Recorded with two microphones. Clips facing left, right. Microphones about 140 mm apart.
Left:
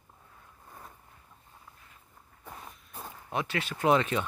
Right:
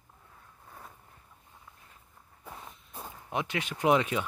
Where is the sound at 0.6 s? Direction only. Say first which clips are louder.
Even; centre (ahead or behind).